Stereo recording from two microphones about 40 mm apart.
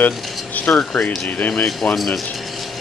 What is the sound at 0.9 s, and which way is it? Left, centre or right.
Speech, left.